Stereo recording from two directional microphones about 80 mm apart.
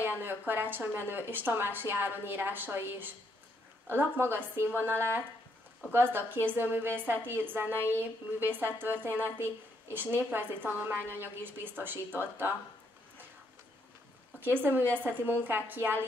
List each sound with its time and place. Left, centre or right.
0.0 s a woman's voice: right
7.7 s a woman's voice: left
8.0 s a woman's voice: right
14.4 s a woman's voice: right